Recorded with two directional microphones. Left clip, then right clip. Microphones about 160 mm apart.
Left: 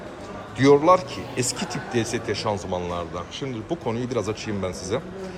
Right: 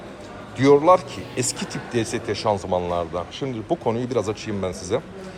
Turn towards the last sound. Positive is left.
turn(degrees=10)  # may be behind; listen again after turning